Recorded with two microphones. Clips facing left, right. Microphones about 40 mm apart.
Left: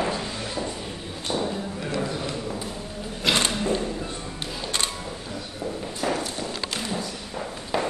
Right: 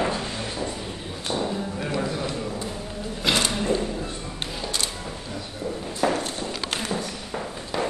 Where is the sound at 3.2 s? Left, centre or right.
Centre.